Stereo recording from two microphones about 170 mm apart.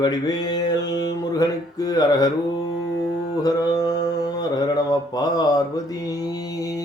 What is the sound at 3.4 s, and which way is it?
Mantra, 20° left (ahead or behind).